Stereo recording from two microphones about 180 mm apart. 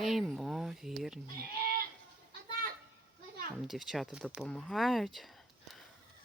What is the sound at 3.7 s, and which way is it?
Speech, centre (ahead or behind).